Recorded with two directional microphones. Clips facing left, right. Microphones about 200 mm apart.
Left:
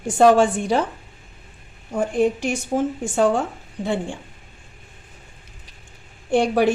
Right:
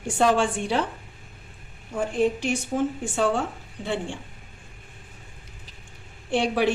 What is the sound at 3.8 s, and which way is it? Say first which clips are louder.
Speech: left 4 dB; 50° left (ahead or behind).